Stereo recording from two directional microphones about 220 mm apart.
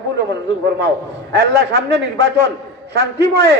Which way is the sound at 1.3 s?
45° right (ahead or behind).